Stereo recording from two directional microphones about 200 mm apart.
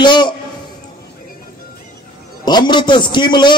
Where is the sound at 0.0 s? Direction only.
20° left (ahead or behind).